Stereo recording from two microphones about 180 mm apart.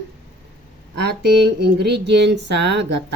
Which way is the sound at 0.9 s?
65° right (ahead or behind).